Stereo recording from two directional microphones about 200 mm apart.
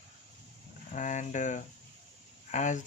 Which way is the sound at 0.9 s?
40° left (ahead or behind).